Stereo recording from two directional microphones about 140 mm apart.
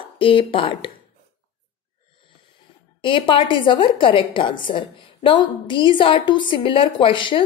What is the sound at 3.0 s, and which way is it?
A woman's voice, 35° left (ahead or behind).